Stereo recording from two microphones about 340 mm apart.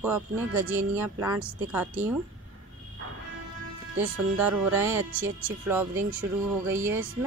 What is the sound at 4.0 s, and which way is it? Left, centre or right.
Speech, centre.